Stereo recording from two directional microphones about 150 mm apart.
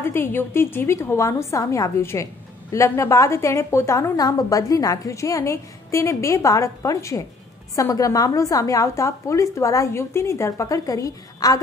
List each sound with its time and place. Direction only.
0.0 s a woman's voice: 15° left (ahead or behind)